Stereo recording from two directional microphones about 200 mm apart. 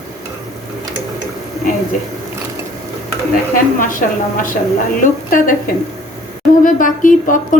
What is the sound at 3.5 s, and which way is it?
Speech, 40° left (ahead or behind).